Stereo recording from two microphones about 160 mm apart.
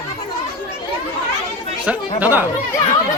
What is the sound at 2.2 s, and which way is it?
Speech, 10° right (ahead or behind).